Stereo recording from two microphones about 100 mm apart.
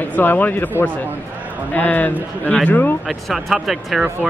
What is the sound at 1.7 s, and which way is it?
Speech, 15° left (ahead or behind).